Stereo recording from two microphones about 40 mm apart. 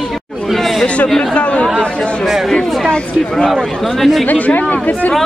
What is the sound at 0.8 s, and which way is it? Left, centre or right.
Speech, left.